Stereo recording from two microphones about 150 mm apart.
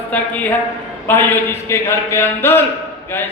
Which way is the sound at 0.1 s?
10° left (ahead or behind).